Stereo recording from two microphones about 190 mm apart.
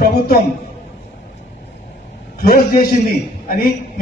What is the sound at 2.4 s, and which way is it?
A man's voice, 50° left (ahead or behind).